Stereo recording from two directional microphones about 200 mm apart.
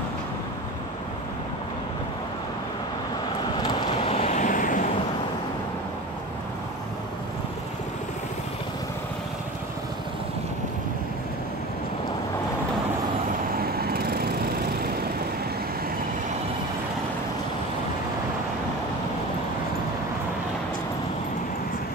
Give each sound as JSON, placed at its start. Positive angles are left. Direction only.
{"t": 4.0, "sound": "vehicle", "side_deg": 30}
{"t": 13.6, "sound": "vehicle", "side_deg": -50}